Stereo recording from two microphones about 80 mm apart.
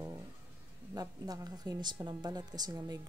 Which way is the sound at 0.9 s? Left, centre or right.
Right.